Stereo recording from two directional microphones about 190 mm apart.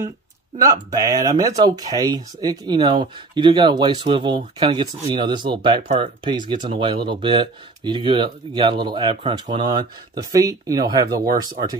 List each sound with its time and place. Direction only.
0.6 s speech: 20° right (ahead or behind)